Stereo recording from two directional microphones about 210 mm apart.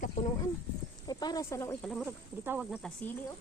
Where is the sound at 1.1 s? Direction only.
20° left (ahead or behind).